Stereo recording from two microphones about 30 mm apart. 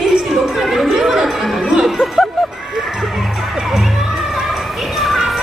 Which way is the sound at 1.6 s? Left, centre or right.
Right.